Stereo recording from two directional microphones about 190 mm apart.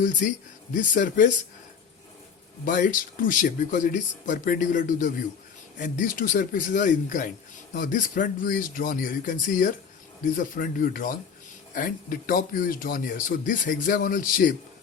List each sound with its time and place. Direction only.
0.7 s a man's voice: 45° left (ahead or behind)
2.6 s a man's voice: 45° left (ahead or behind)